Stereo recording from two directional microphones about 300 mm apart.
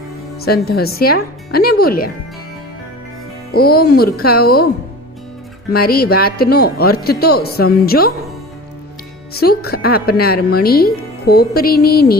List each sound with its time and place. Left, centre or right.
0.3 s speech: left
3.5 s speech: left
5.7 s speech: left
9.3 s speech: left